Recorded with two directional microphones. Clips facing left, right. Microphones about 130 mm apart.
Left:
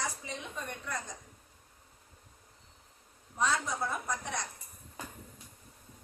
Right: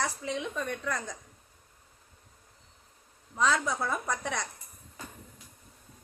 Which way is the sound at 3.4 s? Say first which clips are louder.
Right 4 dB; 90° right.